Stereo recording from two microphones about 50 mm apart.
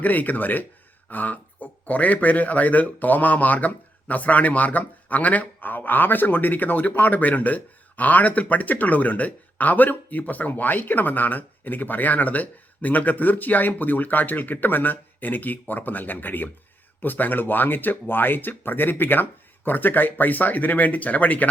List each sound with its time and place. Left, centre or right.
0.0 s a man's voice: left